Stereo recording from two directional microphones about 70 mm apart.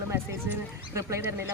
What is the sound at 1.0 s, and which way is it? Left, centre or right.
Speech, right.